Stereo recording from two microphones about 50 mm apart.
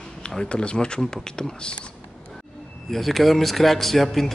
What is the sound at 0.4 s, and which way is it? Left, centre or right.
Speech, centre.